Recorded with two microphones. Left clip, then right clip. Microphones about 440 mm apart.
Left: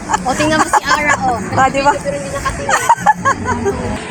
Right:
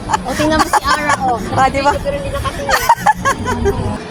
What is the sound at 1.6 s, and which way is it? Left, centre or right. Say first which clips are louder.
Speech: left 1 dB; right.